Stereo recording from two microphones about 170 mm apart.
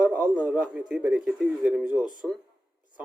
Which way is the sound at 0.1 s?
10° right (ahead or behind).